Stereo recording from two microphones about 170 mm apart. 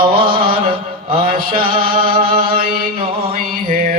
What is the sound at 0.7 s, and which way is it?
Mantra, 35° right (ahead or behind).